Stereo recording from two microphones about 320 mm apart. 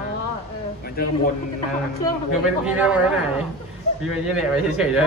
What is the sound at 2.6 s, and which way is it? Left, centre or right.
Speech, centre.